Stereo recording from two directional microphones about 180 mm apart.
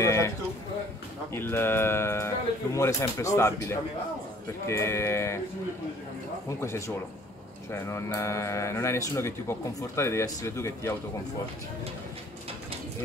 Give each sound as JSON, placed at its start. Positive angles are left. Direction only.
{"t": 0.0, "sound": "a sound", "side_deg": 15}
{"t": 1.3, "sound": "speech", "side_deg": 15}
{"t": 7.7, "sound": "speech", "side_deg": 15}